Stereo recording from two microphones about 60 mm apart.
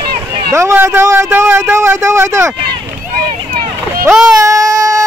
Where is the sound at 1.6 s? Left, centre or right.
Right.